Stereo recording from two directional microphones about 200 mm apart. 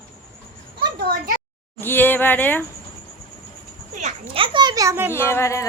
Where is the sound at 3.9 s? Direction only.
30° right (ahead or behind); by 5.1 s 15° right (ahead or behind).